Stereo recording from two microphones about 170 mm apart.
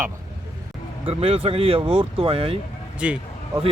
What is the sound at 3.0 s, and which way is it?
Speech, 5° right (ahead or behind).